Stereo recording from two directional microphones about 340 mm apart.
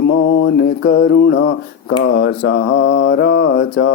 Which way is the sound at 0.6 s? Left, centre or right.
Left.